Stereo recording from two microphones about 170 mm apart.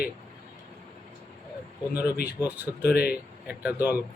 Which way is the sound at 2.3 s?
10° right (ahead or behind).